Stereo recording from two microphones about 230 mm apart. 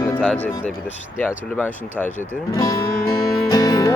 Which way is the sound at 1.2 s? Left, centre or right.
Centre.